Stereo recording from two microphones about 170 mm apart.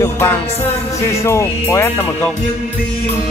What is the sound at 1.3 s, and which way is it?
Speech, 15° left (ahead or behind).